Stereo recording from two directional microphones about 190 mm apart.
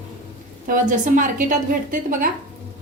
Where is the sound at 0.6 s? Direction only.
45° right (ahead or behind).